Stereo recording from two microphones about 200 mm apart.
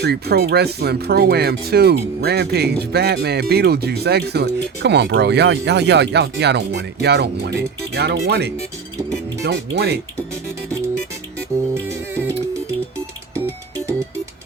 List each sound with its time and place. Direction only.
0.0 s speech: 55° right (ahead or behind)
11.7 s music: 10° right (ahead or behind)